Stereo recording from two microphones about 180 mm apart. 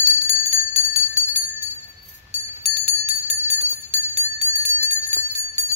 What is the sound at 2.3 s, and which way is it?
Bell, 35° right (ahead or behind).